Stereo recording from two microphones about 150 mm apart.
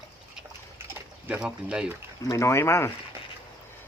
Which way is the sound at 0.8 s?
15° right (ahead or behind).